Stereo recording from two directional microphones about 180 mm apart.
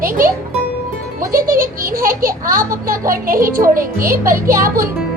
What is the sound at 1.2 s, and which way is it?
A child's voice, 50° right (ahead or behind).